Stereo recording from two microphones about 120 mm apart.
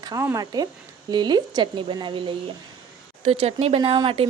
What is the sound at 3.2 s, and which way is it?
Speech, 55° right (ahead or behind).